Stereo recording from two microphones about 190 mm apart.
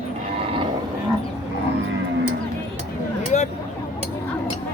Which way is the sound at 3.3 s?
40° left (ahead or behind).